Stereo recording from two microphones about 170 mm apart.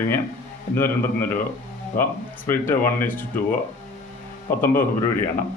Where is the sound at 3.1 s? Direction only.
55° left (ahead or behind).